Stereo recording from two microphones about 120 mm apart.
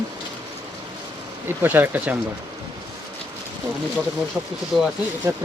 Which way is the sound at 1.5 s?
15° right (ahead or behind).